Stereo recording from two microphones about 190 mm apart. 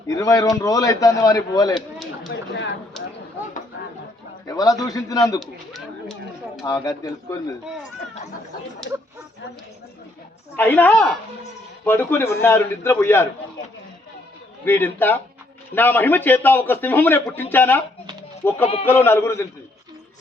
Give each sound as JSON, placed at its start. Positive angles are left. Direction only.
{"t": 0.1, "sound": "a man's voice", "side_deg": 15}
{"t": 2.3, "sound": "speech", "side_deg": 70}
{"t": 4.4, "sound": "a man's voice", "side_deg": 20}
{"t": 5.4, "sound": "speech", "side_deg": 0}
{"t": 6.6, "sound": "a man's voice", "side_deg": 20}
{"t": 10.6, "sound": "a man's voice", "side_deg": 10}
{"t": 14.6, "sound": "a man's voice", "side_deg": 10}
{"t": 18.6, "sound": "speech", "side_deg": 30}
{"t": 18.9, "sound": "a man's voice", "side_deg": 10}